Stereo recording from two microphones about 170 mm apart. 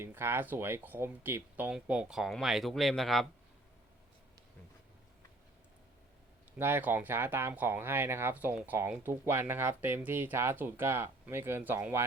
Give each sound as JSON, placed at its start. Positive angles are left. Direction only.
{"t": 0.0, "sound": "speech", "side_deg": -15}
{"t": 6.6, "sound": "speech", "side_deg": -10}